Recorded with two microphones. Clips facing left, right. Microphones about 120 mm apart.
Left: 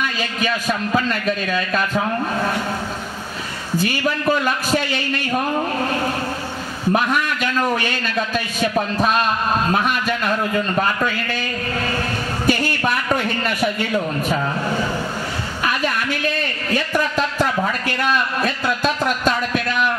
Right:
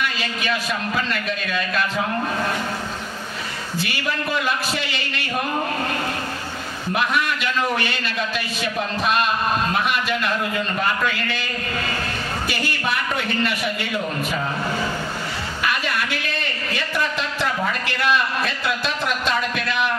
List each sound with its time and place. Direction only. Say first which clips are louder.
0.0 s a man's voice: left 3 dB; 40° left (ahead or behind)
3.7 s a man's voice: left 6 dB; 40° left (ahead or behind)
6.9 s a man's voice: left 5 dB; 40° left (ahead or behind)
9.7 s a man's voice: left 3 dB; 40° left (ahead or behind)
12.4 s a sound: left 8 dB; 40° left (ahead or behind)
16.7 s a sound: left 5 dB; 45° left (ahead or behind)